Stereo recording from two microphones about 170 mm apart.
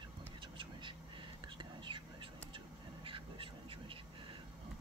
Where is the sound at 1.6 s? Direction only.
30° right (ahead or behind).